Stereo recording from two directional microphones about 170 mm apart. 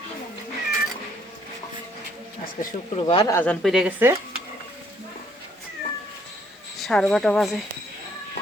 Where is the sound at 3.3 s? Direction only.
15° left (ahead or behind).